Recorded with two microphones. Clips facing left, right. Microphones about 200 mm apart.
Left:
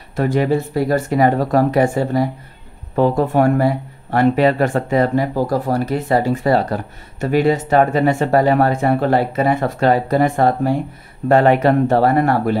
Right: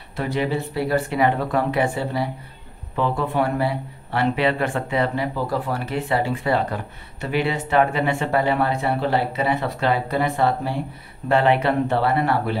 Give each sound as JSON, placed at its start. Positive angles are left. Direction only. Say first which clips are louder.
{"t": 0.1, "sound": "speech", "louder": "left 7 dB", "side_deg": 45}